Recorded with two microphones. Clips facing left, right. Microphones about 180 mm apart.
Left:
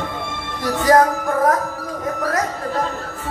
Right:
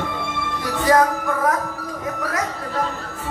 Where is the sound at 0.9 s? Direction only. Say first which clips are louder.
Left 3 dB; 40° left (ahead or behind).